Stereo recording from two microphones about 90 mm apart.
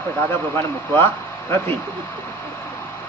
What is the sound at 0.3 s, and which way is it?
Speech, 25° left (ahead or behind).